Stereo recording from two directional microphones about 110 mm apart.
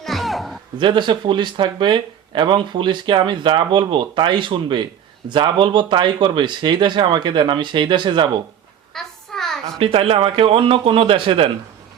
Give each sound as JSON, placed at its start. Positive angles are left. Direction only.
{"t": 0.0, "sound": "music", "side_deg": 0}
{"t": 0.8, "sound": "speech", "side_deg": -45}
{"t": 8.9, "sound": "a sound", "side_deg": 5}
{"t": 9.7, "sound": "a man's voice", "side_deg": -55}